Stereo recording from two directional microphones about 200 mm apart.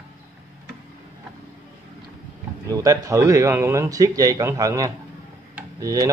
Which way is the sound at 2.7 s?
15° right (ahead or behind).